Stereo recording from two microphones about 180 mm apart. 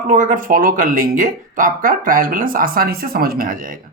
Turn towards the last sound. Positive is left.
turn(degrees=-50)  # may be behind; listen again after turning